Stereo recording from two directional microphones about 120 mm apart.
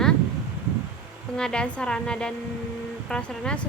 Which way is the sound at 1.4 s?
5° left (ahead or behind).